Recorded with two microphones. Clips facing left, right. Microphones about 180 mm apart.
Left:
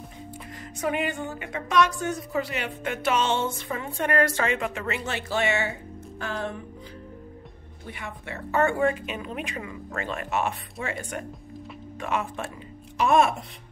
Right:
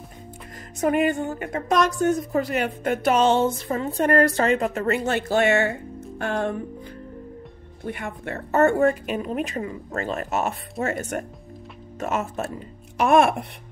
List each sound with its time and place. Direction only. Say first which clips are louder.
0.7 s a woman's voice: right 7 dB; 45° right (ahead or behind)
7.8 s a woman's voice: right 7 dB; 50° right (ahead or behind)